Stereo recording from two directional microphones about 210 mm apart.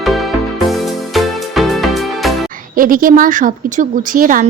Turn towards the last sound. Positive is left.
turn(degrees=-40)  # may be behind; listen again after turning